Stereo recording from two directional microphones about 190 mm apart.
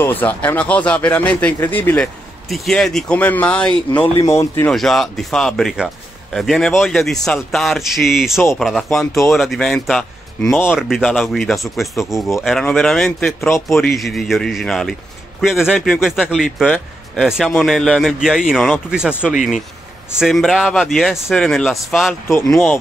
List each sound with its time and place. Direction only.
0.0 s speech: 10° left (ahead or behind)
4.7 s speech: centre (ahead or behind)
20.2 s speech: centre (ahead or behind)